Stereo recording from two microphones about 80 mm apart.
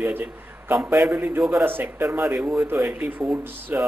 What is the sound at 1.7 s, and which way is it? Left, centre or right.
Speech, right.